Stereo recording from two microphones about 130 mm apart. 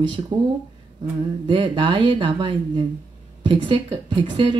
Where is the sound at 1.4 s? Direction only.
40° right (ahead or behind).